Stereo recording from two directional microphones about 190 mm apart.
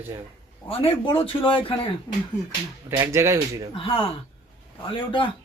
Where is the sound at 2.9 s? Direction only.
15° right (ahead or behind).